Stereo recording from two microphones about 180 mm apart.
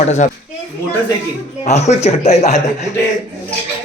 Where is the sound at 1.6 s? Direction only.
40° left (ahead or behind).